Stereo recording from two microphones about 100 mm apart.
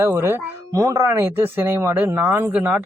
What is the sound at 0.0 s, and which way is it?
Speech, 25° right (ahead or behind).